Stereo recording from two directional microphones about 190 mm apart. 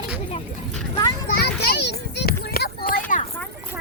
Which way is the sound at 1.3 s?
55° left (ahead or behind).